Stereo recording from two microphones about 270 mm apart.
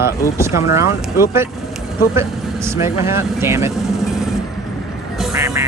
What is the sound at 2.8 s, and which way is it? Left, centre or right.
Speech, centre.